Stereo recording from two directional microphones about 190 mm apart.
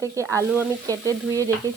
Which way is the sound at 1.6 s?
20° right (ahead or behind).